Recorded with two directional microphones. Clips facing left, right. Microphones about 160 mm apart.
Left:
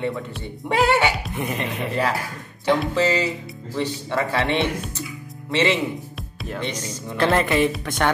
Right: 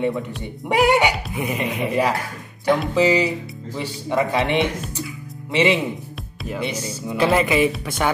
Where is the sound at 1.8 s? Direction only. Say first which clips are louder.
Right 3 dB; 15° right (ahead or behind).